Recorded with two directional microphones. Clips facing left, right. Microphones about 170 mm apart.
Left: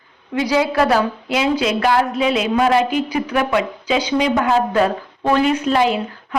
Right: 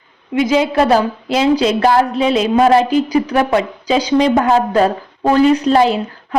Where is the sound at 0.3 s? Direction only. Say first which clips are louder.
Right 3 dB; 20° right (ahead or behind).